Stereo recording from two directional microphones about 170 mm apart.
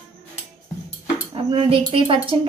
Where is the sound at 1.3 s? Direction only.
30° right (ahead or behind).